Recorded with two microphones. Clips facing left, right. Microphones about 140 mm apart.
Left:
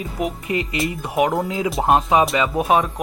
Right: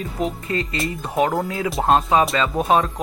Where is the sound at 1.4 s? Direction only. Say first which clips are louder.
Left 2 dB; 20° left (ahead or behind).